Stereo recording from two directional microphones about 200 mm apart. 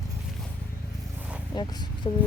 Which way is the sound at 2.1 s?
25° left (ahead or behind).